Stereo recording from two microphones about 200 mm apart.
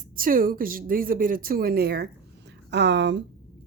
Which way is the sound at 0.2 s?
45° right (ahead or behind).